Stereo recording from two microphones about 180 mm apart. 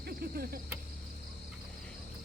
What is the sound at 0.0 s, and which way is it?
Cricket, 60° right (ahead or behind).